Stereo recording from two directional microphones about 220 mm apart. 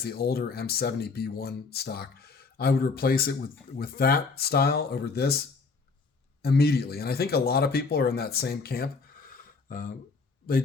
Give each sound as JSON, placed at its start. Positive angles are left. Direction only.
{"t": 0.0, "sound": "speech", "side_deg": 45}
{"t": 6.4, "sound": "speech", "side_deg": 45}
{"t": 9.3, "sound": "a sound", "side_deg": 40}